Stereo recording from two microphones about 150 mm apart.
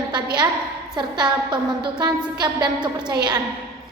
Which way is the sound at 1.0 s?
30° right (ahead or behind).